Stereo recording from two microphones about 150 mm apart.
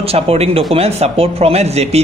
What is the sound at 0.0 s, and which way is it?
Speech, 40° right (ahead or behind).